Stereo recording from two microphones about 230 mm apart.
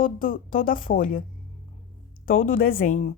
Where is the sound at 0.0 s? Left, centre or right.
Left.